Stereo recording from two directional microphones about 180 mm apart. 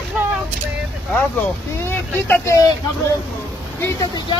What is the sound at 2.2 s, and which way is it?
Speech, 15° left (ahead or behind).